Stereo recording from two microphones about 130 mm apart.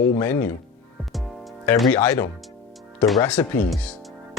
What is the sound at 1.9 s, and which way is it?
Speech, 15° left (ahead or behind).